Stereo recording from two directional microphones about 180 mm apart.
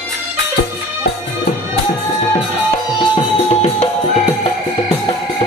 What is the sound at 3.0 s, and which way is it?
Music, 35° left (ahead or behind).